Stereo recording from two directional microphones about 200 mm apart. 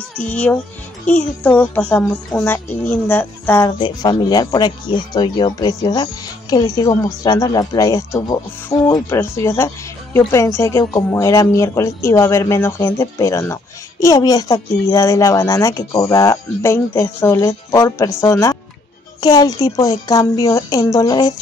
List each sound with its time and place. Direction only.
0.2 s speech: 5° left (ahead or behind)